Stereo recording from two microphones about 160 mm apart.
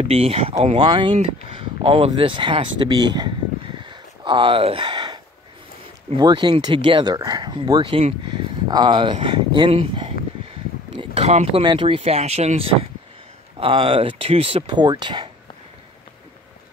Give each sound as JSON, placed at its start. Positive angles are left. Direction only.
{"t": 0.1, "sound": "speech", "side_deg": -35}
{"t": 3.7, "sound": "a sound", "side_deg": -30}
{"t": 6.1, "sound": "speech", "side_deg": -25}